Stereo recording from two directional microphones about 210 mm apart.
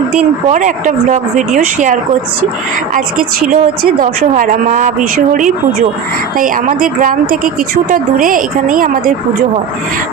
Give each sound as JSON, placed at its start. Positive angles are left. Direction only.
{"t": 0.5, "sound": "a woman's voice", "side_deg": -35}
{"t": 3.5, "sound": "a woman's voice", "side_deg": -40}